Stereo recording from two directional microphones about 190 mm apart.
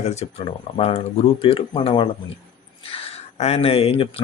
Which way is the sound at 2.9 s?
30° left (ahead or behind).